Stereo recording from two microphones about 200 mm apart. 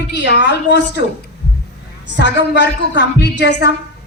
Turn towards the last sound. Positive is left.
turn(degrees=60)  # may be behind; listen again after turning